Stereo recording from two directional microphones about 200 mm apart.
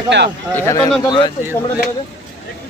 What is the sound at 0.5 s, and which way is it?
Speech, 15° left (ahead or behind).